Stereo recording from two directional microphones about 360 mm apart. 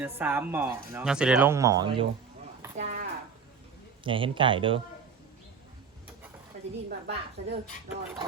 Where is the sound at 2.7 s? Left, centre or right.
Centre.